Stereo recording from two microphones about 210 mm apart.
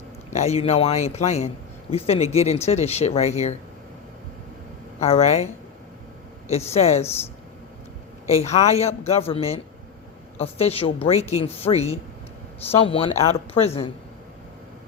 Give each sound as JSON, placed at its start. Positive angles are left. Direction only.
{"t": 0.3, "sound": "a man's voice", "side_deg": 30}
{"t": 4.9, "sound": "a man's voice", "side_deg": 30}
{"t": 6.7, "sound": "a man's voice", "side_deg": 30}
{"t": 8.3, "sound": "speech", "side_deg": 30}